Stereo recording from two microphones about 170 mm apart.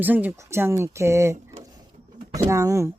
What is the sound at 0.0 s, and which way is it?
Speech, 10° right (ahead or behind).